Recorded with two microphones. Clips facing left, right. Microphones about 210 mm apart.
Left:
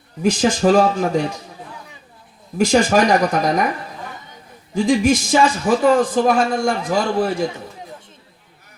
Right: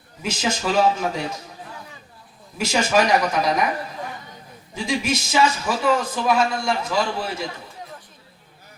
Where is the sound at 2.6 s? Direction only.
45° left (ahead or behind).